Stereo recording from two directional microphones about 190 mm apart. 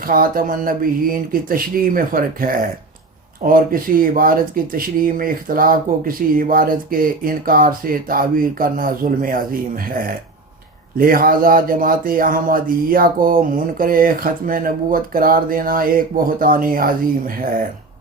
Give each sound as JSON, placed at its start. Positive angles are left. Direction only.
{"t": 0.0, "sound": "speech", "side_deg": -50}